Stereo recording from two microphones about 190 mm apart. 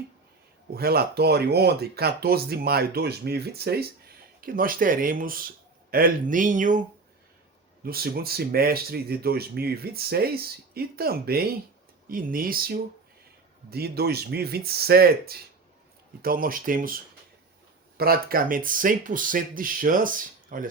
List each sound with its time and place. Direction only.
0.7 s speech: 55° right (ahead or behind)
7.9 s speech: 55° right (ahead or behind)